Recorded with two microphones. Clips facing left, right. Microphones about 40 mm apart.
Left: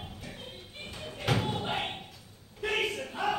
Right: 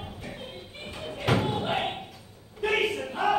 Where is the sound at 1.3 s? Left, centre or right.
Centre.